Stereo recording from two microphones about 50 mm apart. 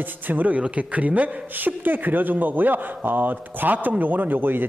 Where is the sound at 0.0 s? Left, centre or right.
Right.